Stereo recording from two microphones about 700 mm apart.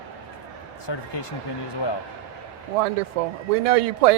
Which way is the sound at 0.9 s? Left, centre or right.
Left.